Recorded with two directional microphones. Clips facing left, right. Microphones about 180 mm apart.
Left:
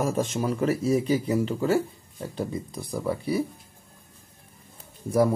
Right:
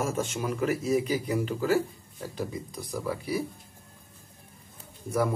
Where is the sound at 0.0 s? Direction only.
35° left (ahead or behind).